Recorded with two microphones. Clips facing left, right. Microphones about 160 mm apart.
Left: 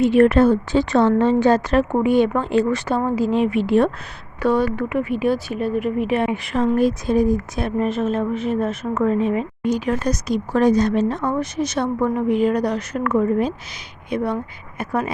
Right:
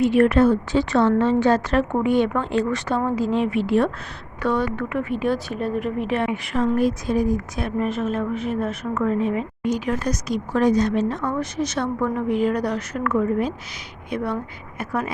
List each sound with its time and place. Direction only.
0.0 s a woman's voice: 30° left (ahead or behind); by 6.2 s 10° left (ahead or behind)
6.2 s speech: 25° left (ahead or behind)